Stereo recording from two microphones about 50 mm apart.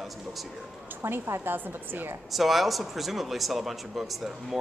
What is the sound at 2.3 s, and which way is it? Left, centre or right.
A man's voice, centre.